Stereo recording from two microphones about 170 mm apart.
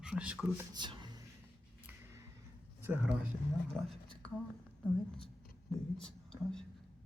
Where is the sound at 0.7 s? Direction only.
25° right (ahead or behind).